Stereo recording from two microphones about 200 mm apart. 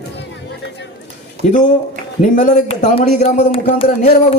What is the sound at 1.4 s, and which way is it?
Speech, 40° left (ahead or behind).